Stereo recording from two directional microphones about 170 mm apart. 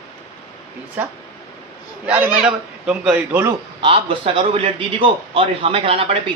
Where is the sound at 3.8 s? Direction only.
30° right (ahead or behind).